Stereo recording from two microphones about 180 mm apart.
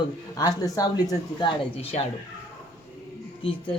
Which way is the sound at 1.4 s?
35° left (ahead or behind).